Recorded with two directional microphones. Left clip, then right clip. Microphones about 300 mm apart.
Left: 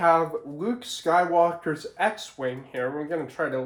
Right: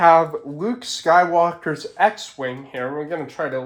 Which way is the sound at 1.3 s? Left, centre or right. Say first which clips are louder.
Right 3 dB; right.